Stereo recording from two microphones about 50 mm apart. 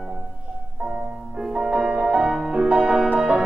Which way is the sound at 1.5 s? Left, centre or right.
Centre.